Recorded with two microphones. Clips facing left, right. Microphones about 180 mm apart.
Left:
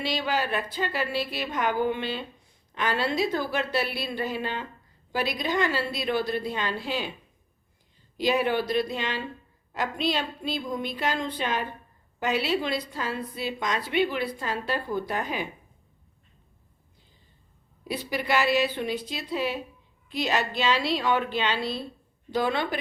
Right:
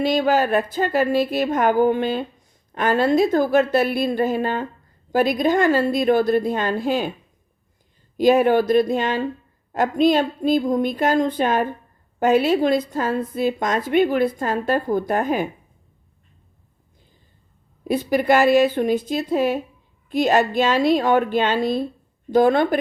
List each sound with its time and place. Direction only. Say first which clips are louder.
0.0 s a woman's voice: right 10 dB; 45° right (ahead or behind)
8.1 s a woman's voice: right 9 dB; 50° right (ahead or behind)
17.8 s a woman's voice: right 11 dB; 50° right (ahead or behind)